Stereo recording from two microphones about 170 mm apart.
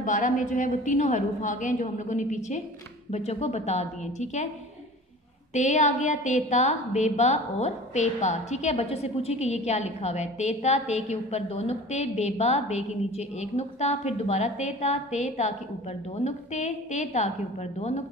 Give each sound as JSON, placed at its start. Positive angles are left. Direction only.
{"t": 0.0, "sound": "a woman's voice", "side_deg": 50}
{"t": 5.5, "sound": "a woman's voice", "side_deg": 45}